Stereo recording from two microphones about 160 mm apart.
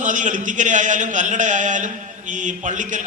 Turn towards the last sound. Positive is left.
turn(degrees=-50)  # may be behind; listen again after turning